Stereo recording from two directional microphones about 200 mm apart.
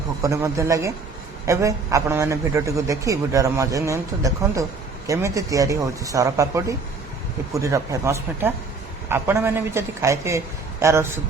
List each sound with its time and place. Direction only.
0.2 s a man's voice: 15° right (ahead or behind)